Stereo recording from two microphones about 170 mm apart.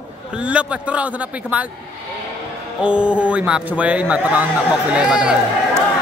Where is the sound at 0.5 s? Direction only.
5° right (ahead or behind).